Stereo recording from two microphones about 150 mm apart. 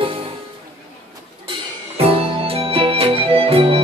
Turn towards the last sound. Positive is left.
turn(degrees=-40)  # may be behind; listen again after turning